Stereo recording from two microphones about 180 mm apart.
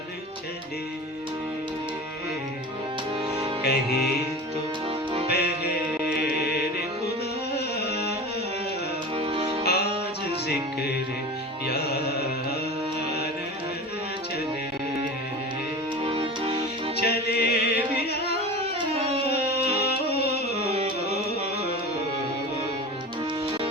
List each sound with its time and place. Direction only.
3.6 s music: 60° left (ahead or behind)
5.3 s music: 65° left (ahead or behind)
9.1 s music: 30° right (ahead or behind)
9.6 s music: 65° left (ahead or behind)
16.0 s music: 30° right (ahead or behind)
17.0 s music: 65° left (ahead or behind)
20.7 s carnatic music: 35° right (ahead or behind)